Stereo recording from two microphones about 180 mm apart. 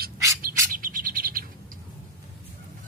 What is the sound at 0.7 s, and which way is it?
Chirp, 50° right (ahead or behind).